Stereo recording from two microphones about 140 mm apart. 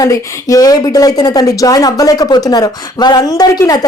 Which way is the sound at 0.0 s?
25° left (ahead or behind).